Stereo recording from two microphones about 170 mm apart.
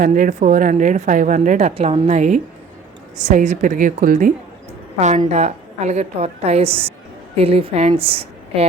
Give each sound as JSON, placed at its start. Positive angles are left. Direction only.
{"t": 0.0, "sound": "a woman's voice", "side_deg": -50}